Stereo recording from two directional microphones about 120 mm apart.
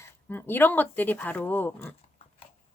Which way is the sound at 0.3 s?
15° left (ahead or behind).